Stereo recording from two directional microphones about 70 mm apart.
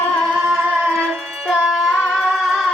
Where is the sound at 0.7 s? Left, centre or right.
Centre.